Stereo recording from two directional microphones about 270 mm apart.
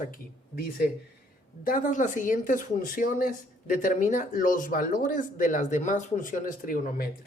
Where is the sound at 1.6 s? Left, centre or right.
Left.